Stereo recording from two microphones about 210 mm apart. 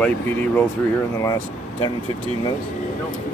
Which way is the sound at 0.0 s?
10° left (ahead or behind).